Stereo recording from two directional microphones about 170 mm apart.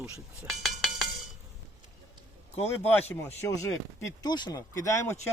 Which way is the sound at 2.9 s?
10° left (ahead or behind).